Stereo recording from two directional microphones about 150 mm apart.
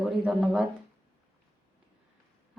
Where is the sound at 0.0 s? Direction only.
5° right (ahead or behind).